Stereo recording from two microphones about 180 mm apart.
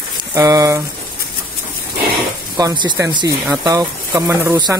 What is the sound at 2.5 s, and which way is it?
Speech, 25° right (ahead or behind).